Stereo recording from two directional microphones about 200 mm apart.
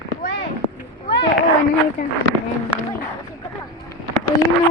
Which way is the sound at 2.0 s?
45° left (ahead or behind).